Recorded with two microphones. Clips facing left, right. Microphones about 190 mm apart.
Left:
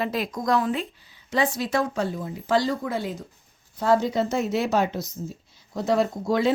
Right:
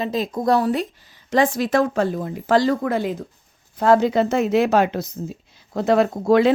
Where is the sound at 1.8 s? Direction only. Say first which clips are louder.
Right 6 dB; 55° right (ahead or behind); by 2.6 s 75° right (ahead or behind).